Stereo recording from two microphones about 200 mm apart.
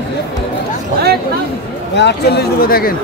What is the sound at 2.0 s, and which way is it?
Speech, 55° left (ahead or behind).